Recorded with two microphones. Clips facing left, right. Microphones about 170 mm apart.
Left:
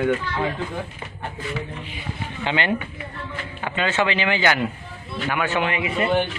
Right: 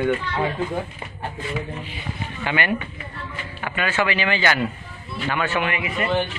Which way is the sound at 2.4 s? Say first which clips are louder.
Left 1 dB; 20° left (ahead or behind).